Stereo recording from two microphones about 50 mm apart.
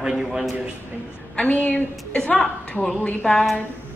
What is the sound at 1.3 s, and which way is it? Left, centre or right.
A woman's voice, left.